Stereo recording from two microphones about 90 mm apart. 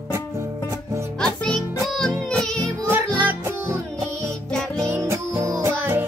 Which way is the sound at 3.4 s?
30° right (ahead or behind).